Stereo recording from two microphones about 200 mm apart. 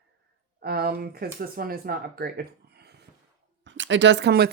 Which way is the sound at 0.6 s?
50° right (ahead or behind).